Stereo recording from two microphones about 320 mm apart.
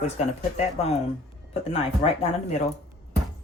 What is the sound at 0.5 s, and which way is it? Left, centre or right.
Speech, centre.